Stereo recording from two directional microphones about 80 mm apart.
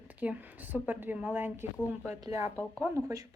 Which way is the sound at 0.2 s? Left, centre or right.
Centre.